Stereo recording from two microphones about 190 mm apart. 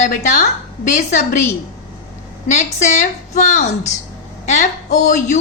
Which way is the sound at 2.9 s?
40° left (ahead or behind).